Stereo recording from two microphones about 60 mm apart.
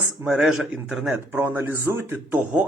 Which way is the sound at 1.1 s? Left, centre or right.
Right.